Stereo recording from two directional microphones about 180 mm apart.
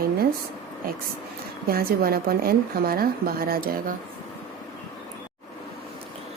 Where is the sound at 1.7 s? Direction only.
55° right (ahead or behind).